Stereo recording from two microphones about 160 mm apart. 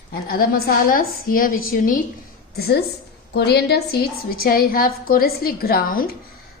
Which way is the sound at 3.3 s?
90° left.